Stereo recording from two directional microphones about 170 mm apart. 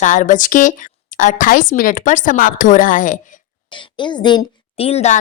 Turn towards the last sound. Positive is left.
turn(degrees=40)  # may be behind; listen again after turning